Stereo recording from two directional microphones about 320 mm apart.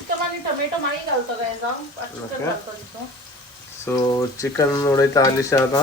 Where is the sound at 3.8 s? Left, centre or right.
Centre.